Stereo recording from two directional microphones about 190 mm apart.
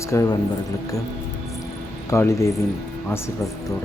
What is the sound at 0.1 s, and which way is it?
Speech, 15° left (ahead or behind).